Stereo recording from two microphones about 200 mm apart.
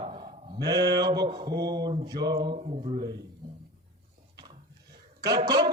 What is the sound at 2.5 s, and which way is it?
Speech, 35° right (ahead or behind).